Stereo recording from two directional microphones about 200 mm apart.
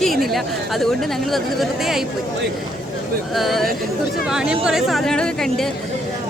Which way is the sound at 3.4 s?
Centre (ahead or behind).